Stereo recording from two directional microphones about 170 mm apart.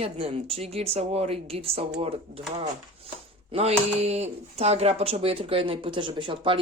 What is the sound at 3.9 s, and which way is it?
Speech, 40° right (ahead or behind).